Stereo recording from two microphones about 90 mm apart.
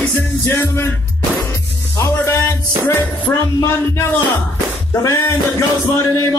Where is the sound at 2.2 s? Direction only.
30° left (ahead or behind).